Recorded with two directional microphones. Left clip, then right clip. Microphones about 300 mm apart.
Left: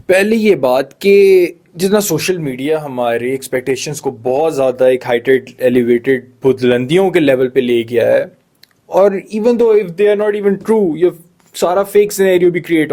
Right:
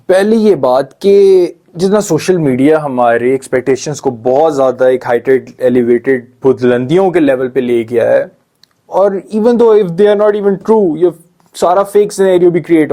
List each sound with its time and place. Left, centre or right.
0.1 s speech: left
2.4 s speech: centre
8.9 s speech: left
9.4 s speech: left